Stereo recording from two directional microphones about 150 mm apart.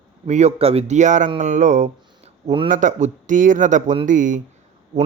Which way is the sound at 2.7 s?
55° right (ahead or behind).